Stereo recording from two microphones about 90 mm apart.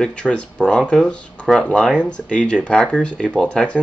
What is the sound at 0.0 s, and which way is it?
Speech, 10° left (ahead or behind).